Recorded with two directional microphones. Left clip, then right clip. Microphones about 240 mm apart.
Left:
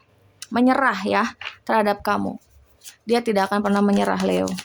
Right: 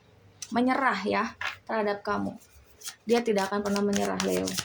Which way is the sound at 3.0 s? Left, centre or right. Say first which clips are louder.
Left 5 dB; centre.